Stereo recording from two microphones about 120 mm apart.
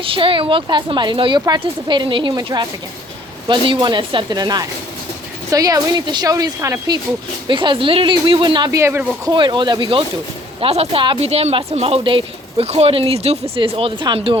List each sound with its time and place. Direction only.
0.0 s a woman's voice: 45° right (ahead or behind); by 6.9 s 30° right (ahead or behind)
7.4 s speech: 45° right (ahead or behind)
8.7 s a woman's voice: 25° right (ahead or behind)
9.2 s speech: 40° right (ahead or behind)
10.6 s speech: 55° right (ahead or behind)
11.2 s speech: 60° right (ahead or behind)
13.6 s speech: 45° right (ahead or behind)